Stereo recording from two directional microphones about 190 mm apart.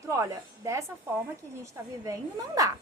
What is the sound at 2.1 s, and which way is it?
Speech, 20° right (ahead or behind).